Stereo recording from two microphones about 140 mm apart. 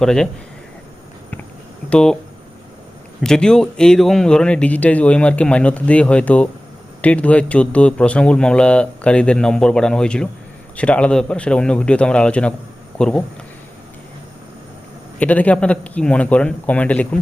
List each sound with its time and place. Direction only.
0.0 s speech: 5° left (ahead or behind)
1.9 s speech: 5° left (ahead or behind)
3.2 s speech: 5° left (ahead or behind)
15.2 s speech: 10° left (ahead or behind)